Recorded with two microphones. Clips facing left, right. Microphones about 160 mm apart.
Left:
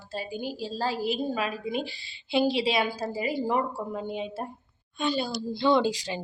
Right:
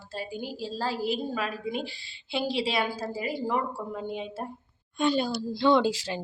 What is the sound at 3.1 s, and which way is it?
Speech, 5° left (ahead or behind).